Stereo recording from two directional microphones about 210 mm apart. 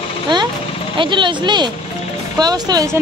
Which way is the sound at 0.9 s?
25° right (ahead or behind).